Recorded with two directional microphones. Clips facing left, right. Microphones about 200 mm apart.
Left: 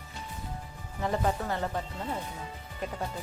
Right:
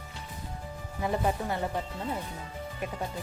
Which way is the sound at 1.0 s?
15° right (ahead or behind).